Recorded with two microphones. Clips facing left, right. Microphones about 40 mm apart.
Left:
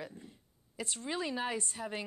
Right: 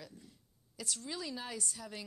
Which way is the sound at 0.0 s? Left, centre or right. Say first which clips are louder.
Left 7 dB; left.